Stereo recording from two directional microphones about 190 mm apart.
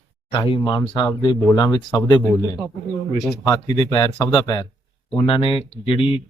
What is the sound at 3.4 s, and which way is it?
Speech, 20° left (ahead or behind).